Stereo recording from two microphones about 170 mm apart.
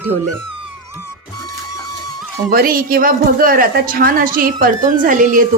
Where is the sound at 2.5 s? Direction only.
60° right (ahead or behind).